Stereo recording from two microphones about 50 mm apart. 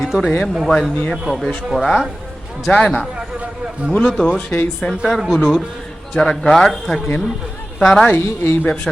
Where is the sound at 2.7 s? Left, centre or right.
Left.